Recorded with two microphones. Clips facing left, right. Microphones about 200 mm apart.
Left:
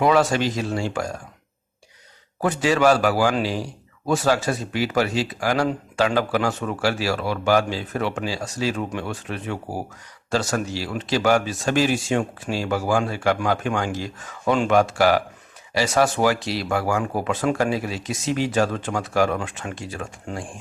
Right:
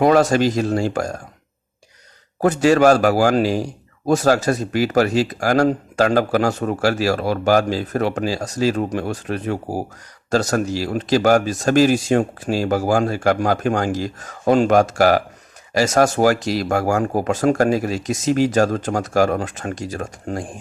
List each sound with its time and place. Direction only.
0.0 s a man's voice: 40° right (ahead or behind)
2.4 s a man's voice: 45° right (ahead or behind)